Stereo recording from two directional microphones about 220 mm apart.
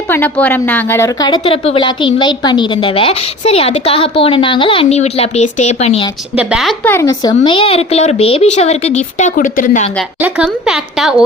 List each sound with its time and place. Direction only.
0.1 s a woman's voice: 10° left (ahead or behind); by 6.1 s 30° left (ahead or behind)
6.3 s a woman's voice: 5° right (ahead or behind); by 9.9 s 35° left (ahead or behind)
10.2 s speech: 5° right (ahead or behind)